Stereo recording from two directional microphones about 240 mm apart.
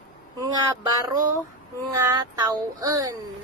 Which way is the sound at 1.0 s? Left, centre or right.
Centre.